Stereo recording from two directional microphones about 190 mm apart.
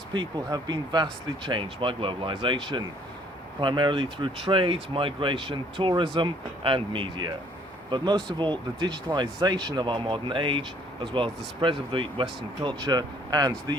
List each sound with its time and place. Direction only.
0.1 s speech: 20° right (ahead or behind)